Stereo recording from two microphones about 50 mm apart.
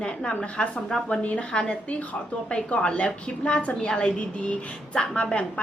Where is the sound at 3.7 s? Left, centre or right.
Centre.